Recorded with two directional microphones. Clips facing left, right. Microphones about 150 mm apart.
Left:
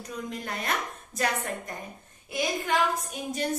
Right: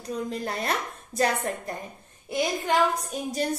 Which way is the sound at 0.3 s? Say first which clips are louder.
Right 1 dB; 35° right (ahead or behind).